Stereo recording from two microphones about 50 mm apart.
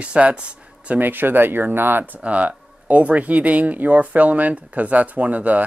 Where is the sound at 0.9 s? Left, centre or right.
Right.